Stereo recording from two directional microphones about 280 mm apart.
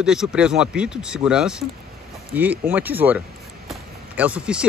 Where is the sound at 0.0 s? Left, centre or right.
Centre.